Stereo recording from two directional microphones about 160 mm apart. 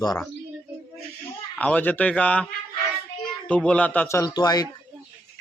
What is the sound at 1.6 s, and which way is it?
Speech, 10° left (ahead or behind).